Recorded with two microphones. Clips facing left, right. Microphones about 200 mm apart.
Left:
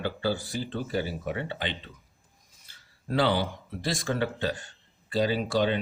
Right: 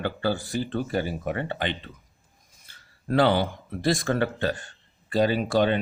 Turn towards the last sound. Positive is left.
turn(degrees=-55)  # may be behind; listen again after turning